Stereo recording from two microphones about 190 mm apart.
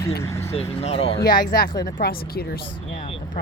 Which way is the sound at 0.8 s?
30° left (ahead or behind).